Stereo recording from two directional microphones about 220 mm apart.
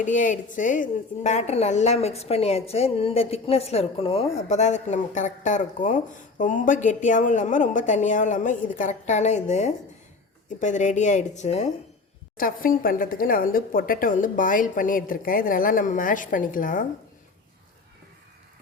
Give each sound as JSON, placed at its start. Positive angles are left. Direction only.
{"t": 0.0, "sound": "a woman's voice", "side_deg": 35}